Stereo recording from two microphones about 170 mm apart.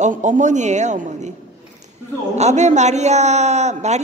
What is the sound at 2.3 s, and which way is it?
A man's voice, 40° right (ahead or behind).